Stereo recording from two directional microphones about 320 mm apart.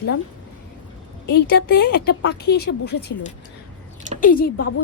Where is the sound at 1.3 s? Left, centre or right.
Left.